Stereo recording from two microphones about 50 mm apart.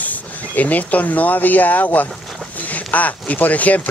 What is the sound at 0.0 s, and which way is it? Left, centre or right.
Speech, left.